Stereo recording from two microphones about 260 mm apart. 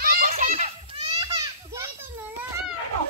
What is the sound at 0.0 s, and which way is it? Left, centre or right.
Children playing, right.